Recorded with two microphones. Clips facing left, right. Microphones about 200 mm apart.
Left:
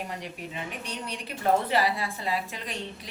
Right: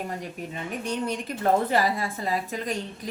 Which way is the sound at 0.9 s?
45° right (ahead or behind).